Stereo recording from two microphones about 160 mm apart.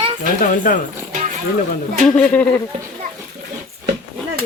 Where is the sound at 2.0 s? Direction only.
10° left (ahead or behind).